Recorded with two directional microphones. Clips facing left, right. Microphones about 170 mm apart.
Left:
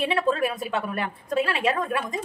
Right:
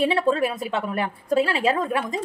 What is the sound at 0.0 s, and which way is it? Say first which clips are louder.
A woman's voice: right 3 dB; 30° right (ahead or behind).